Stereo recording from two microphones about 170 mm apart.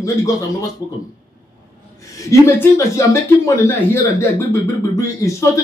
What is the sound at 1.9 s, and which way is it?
A man's voice, 20° left (ahead or behind).